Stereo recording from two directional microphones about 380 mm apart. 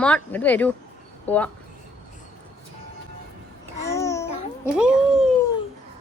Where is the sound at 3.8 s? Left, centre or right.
Centre.